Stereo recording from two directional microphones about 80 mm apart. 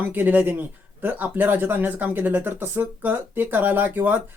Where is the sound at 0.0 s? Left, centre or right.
Right.